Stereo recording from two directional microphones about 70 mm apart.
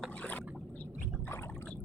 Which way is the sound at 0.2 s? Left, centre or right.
Left.